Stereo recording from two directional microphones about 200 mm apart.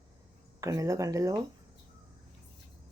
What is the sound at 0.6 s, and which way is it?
Speech, 15° right (ahead or behind).